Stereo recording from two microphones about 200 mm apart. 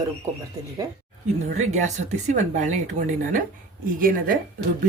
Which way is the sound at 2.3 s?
35° right (ahead or behind).